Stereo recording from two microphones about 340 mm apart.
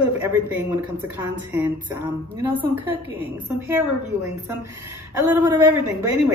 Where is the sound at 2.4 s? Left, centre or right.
Centre.